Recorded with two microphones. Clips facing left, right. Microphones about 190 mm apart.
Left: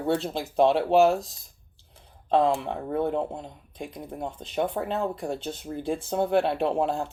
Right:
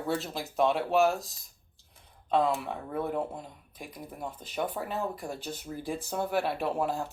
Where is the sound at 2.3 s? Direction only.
30° left (ahead or behind).